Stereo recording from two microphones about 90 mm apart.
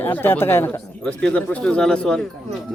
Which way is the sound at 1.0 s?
10° left (ahead or behind).